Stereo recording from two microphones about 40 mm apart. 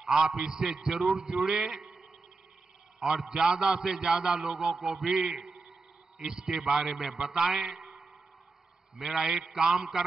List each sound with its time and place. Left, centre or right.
0.1 s a man's voice: centre
3.0 s a man's voice: centre
4.4 s a man's voice: centre
4.9 s a man's voice: centre
9.0 s a man's voice: centre